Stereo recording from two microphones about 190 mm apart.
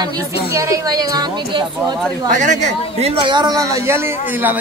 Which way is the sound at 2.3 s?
40° right (ahead or behind).